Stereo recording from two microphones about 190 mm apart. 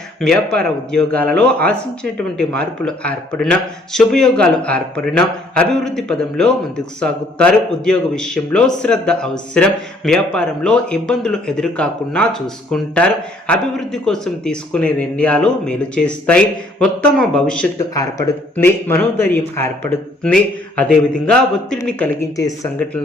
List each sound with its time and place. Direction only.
0.5 s speech: 5° left (ahead or behind)
17.7 s speech: 20° left (ahead or behind)